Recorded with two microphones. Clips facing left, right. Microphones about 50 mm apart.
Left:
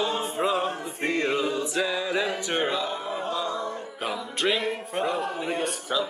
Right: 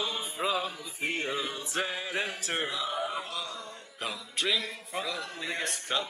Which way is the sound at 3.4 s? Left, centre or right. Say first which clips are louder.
Left 11 dB; left.